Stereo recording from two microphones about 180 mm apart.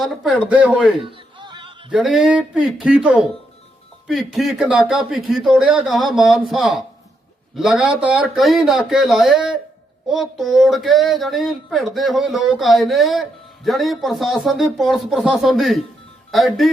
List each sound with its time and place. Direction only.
0.0 s speech: centre (ahead or behind)
1.0 s a sound: 25° right (ahead or behind)
1.9 s speech: 5° right (ahead or behind)